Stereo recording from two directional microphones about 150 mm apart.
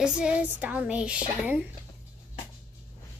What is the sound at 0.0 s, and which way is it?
A woman's voice, 5° right (ahead or behind).